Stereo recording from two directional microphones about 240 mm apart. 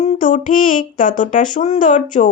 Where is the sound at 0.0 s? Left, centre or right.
Left.